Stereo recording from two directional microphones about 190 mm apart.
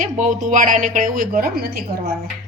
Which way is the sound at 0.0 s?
40° right (ahead or behind).